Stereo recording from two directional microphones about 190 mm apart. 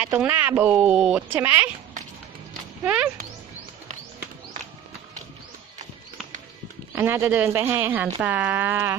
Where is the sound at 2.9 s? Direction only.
5° right (ahead or behind).